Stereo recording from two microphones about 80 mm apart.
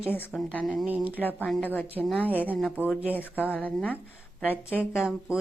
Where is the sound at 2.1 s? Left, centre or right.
Right.